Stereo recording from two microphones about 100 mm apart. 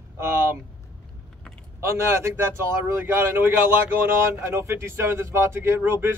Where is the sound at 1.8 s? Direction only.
30° right (ahead or behind).